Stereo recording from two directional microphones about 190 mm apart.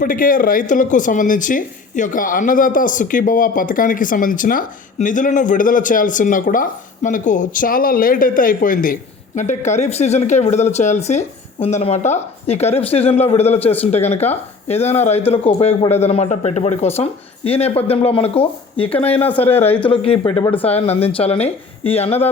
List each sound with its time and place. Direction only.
0.0 s speech: 45° left (ahead or behind)
15.5 s speech: 20° left (ahead or behind)
15.9 s speech: 35° left (ahead or behind)